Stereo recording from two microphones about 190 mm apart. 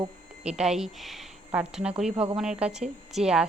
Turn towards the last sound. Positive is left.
turn(degrees=-5)  # may be behind; listen again after turning